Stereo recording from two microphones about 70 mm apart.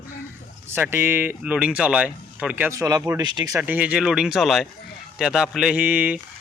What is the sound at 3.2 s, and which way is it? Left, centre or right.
Speech, right.